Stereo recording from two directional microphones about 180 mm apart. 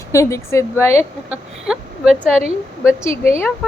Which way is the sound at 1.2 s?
5° right (ahead or behind).